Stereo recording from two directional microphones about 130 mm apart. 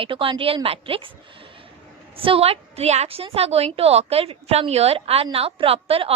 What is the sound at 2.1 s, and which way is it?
A woman's voice, 45° right (ahead or behind).